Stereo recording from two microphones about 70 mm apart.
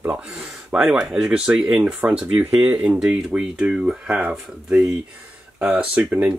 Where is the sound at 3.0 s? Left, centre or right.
Centre.